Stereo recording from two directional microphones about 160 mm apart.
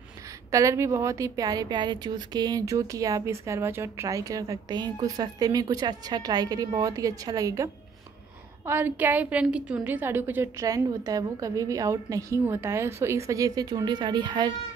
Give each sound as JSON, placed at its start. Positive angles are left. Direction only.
{"t": 0.5, "sound": "a woman's voice", "side_deg": -20}